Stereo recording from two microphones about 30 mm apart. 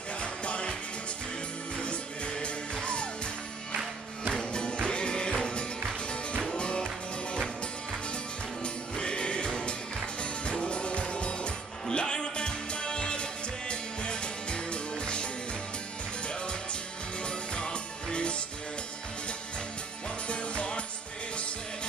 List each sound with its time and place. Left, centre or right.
0.2 s music: left
1.8 s music: left
4.3 s music: left
8.6 s music: left
17.2 s music: left
20.2 s music: left